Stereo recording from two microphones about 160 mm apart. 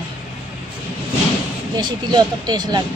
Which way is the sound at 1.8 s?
25° right (ahead or behind).